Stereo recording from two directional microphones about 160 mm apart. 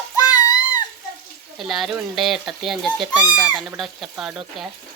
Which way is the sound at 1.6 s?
Centre (ahead or behind).